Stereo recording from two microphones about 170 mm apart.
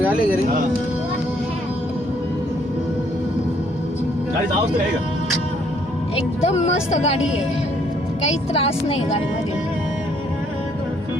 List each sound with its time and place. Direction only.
6.1 s speech: 35° left (ahead or behind)
8.2 s speech: 40° left (ahead or behind)